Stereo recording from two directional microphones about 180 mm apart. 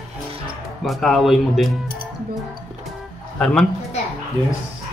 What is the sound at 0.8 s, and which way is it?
Speech, centre (ahead or behind).